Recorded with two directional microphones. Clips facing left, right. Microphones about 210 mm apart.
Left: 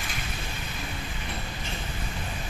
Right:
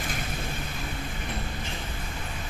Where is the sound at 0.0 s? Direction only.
50° right (ahead or behind).